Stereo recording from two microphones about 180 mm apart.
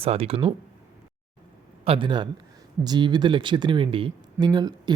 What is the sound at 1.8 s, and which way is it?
Speech, 30° right (ahead or behind).